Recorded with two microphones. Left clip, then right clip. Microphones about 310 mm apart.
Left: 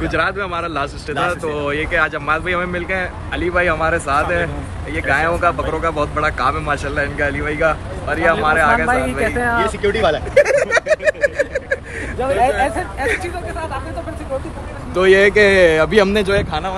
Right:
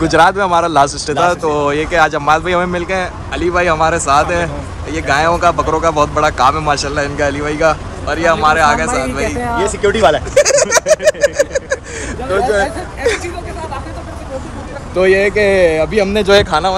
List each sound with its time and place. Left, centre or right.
0.0 s speech: centre
9.6 s a man's voice: right
10.3 s vehicle: centre
15.0 s speech: centre
16.3 s a man's voice: right